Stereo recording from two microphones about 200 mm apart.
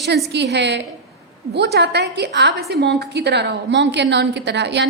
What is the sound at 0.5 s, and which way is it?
A woman's voice, 60° right (ahead or behind).